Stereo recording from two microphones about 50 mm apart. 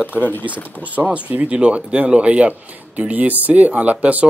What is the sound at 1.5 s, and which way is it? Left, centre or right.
Speech, right.